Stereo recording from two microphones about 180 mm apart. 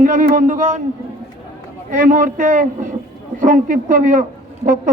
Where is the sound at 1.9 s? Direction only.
45° right (ahead or behind).